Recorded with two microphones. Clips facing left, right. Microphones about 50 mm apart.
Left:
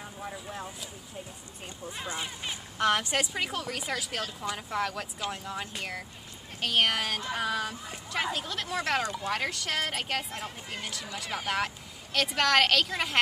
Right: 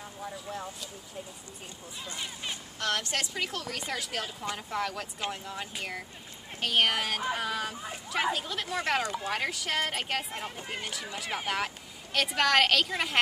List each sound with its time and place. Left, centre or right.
0.2 s speech: centre
2.0 s a woman's voice: centre